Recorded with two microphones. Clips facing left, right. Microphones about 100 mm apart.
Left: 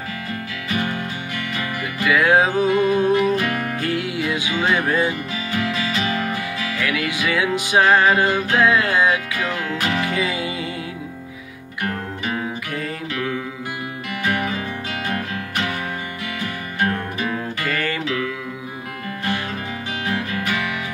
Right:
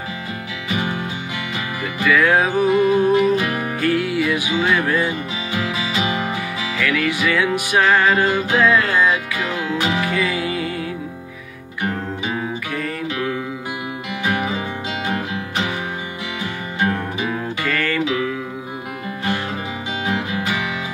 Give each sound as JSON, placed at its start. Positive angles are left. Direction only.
{"t": 0.7, "sound": "music", "side_deg": -15}
{"t": 2.0, "sound": "music", "side_deg": 15}
{"t": 2.5, "sound": "music", "side_deg": -15}
{"t": 3.8, "sound": "music", "side_deg": 15}
{"t": 5.5, "sound": "music", "side_deg": -10}
{"t": 6.8, "sound": "music", "side_deg": 15}
{"t": 9.1, "sound": "music", "side_deg": -15}
{"t": 10.1, "sound": "music", "side_deg": 20}
{"t": 11.8, "sound": "music", "side_deg": -15}
{"t": 14.2, "sound": "music", "side_deg": -15}
{"t": 16.8, "sound": "music", "side_deg": -15}
{"t": 17.6, "sound": "music", "side_deg": 15}
{"t": 20.1, "sound": "music", "side_deg": -15}